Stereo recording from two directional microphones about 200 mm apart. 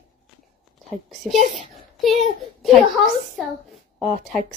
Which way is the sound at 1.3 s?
35° right (ahead or behind).